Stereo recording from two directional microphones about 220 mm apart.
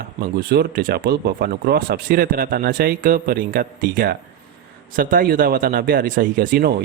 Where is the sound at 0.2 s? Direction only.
45° right (ahead or behind).